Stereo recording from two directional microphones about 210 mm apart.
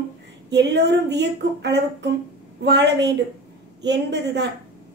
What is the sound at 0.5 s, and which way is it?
Speech, 55° right (ahead or behind).